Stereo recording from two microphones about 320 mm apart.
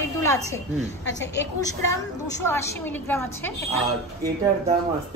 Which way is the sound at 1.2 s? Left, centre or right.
Left.